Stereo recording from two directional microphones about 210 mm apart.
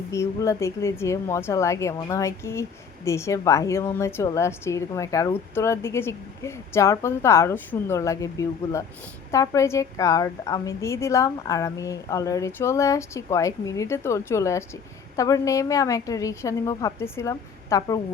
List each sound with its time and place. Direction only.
0.1 s a woman's voice: 15° left (ahead or behind)